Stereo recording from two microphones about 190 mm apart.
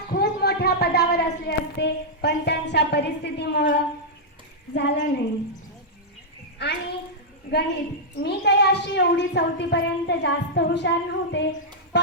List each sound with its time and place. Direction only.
0.1 s a woman's voice: 55° left (ahead or behind)
6.6 s a woman's voice: 65° left (ahead or behind)
8.2 s a woman's voice: 60° left (ahead or behind)